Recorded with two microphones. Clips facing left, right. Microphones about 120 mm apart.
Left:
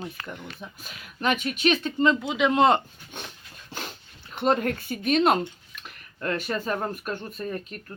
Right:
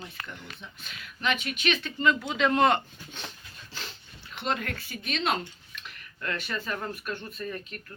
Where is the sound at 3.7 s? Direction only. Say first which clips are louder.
Left 6 dB; 50° left (ahead or behind).